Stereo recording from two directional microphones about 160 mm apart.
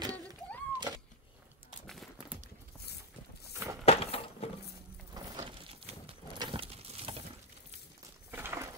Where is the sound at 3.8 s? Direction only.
40° left (ahead or behind).